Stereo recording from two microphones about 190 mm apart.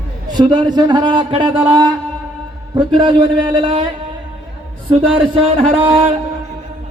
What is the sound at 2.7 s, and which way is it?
A man's voice, 25° right (ahead or behind).